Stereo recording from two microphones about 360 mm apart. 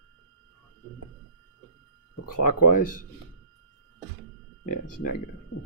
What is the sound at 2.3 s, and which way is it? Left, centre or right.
Speech, left.